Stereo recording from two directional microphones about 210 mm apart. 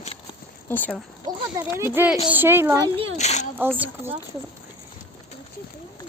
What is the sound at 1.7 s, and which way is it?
Speech, 10° right (ahead or behind).